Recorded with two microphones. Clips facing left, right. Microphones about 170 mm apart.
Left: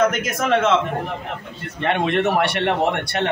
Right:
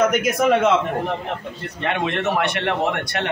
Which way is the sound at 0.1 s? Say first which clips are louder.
Right 3 dB; centre (ahead or behind).